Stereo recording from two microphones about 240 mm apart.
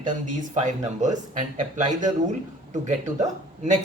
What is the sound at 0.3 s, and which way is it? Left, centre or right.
A man's voice, right.